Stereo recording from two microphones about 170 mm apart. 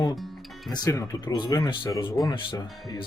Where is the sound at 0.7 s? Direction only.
20° left (ahead or behind).